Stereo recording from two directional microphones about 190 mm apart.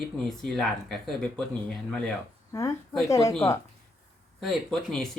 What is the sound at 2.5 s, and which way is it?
Speech, 15° left (ahead or behind).